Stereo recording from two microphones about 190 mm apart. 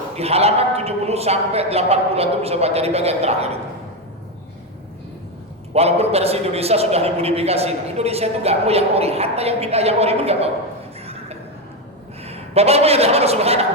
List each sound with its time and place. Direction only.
0.2 s a man's voice: 35° right (ahead or behind)
5.7 s a man's voice: 35° right (ahead or behind)
11.0 s a sound: 30° right (ahead or behind)
12.2 s a man's voice: 30° right (ahead or behind)